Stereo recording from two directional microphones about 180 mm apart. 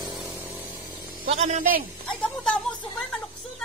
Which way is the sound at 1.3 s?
40° right (ahead or behind).